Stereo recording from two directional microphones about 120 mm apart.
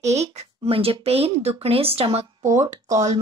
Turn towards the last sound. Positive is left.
turn(degrees=-30)  # may be behind; listen again after turning